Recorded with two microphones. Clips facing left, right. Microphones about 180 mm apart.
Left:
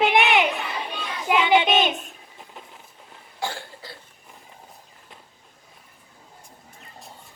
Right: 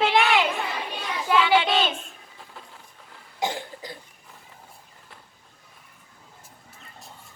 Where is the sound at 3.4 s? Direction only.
20° right (ahead or behind).